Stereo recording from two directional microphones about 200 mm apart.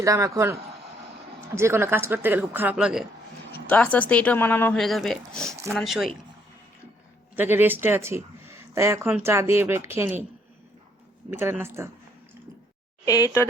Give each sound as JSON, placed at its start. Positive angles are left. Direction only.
{"t": 0.0, "sound": "speech", "side_deg": -15}
{"t": 1.5, "sound": "speech", "side_deg": -15}
{"t": 3.7, "sound": "speech", "side_deg": 5}
{"t": 7.3, "sound": "speech", "side_deg": -10}
{"t": 11.3, "sound": "speech", "side_deg": -10}
{"t": 13.1, "sound": "speech", "side_deg": 15}